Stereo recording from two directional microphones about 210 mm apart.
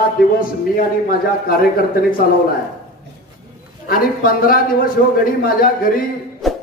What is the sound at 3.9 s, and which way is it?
A man's voice, 45° left (ahead or behind).